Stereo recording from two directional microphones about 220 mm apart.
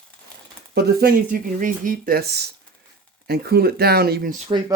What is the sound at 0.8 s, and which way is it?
Speech, 45° right (ahead or behind).